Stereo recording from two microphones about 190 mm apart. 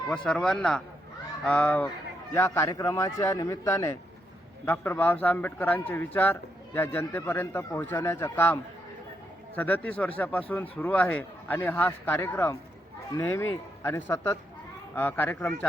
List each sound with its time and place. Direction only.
0.1 s a man's voice: 5° left (ahead or behind)
9.6 s a man's voice: 10° left (ahead or behind)